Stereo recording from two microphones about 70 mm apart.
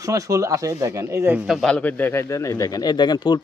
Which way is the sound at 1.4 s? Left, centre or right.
Centre.